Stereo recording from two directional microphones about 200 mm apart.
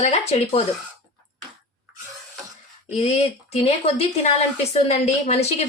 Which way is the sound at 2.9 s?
30° left (ahead or behind).